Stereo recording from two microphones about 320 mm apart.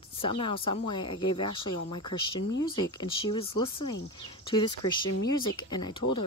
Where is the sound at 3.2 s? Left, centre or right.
Centre.